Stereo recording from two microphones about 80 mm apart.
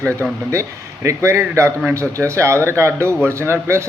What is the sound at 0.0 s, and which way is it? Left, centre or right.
Speech, right.